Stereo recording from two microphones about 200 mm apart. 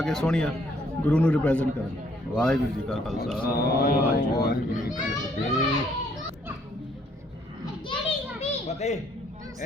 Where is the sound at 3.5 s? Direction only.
50° left (ahead or behind).